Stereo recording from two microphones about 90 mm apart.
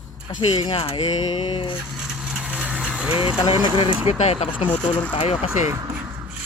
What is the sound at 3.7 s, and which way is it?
Speech, 75° left (ahead or behind).